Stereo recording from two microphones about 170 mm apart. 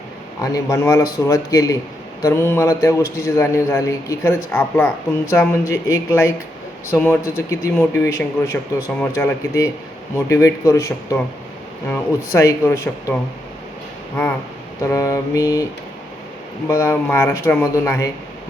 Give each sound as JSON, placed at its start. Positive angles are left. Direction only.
{"t": 0.4, "sound": "a man's voice", "side_deg": 20}
{"t": 14.8, "sound": "mantra", "side_deg": 15}
{"t": 16.6, "sound": "a man's voice", "side_deg": 15}